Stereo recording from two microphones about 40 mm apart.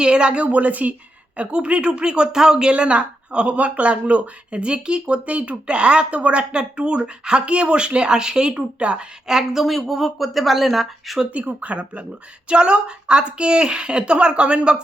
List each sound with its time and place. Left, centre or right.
0.0 s a woman's voice: right
2.7 s speech: right
8.5 s speech: right
9.2 s a woman's voice: centre
11.6 s a woman's voice: right